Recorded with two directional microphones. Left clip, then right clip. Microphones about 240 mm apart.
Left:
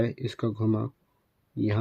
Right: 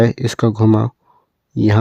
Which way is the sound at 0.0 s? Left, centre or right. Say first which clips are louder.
Right 14 dB; right.